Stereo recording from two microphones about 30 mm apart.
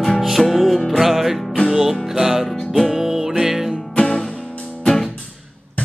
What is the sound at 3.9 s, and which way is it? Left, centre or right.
Music, left.